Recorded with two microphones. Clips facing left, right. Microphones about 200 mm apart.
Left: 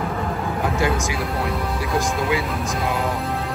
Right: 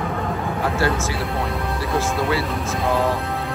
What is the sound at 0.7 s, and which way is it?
Speech, 15° left (ahead or behind).